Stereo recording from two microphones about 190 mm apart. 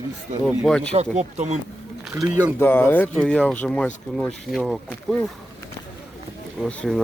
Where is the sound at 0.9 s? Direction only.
35° right (ahead or behind).